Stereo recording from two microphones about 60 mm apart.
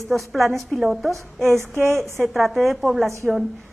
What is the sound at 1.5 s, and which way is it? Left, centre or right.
Music, right.